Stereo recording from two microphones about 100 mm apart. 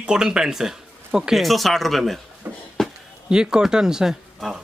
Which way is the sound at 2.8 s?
5° left (ahead or behind).